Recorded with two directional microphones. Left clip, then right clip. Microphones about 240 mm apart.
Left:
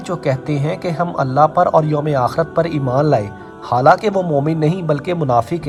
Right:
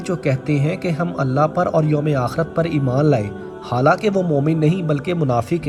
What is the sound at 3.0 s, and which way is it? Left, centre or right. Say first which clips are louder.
Speech: left 2 dB; centre.